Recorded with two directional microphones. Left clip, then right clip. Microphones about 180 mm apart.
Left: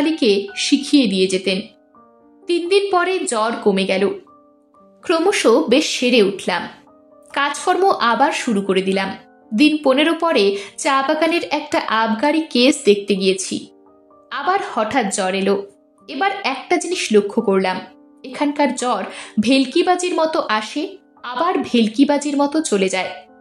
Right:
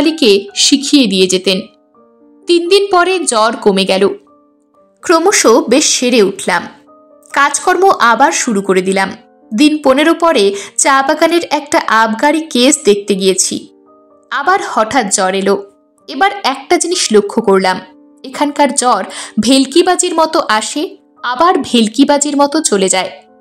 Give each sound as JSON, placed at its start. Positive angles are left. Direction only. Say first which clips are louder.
{"t": 0.0, "sound": "a woman's voice", "louder": "right 7 dB", "side_deg": -30}